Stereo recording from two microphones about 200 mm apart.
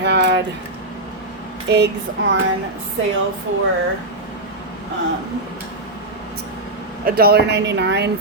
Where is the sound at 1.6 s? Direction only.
55° right (ahead or behind).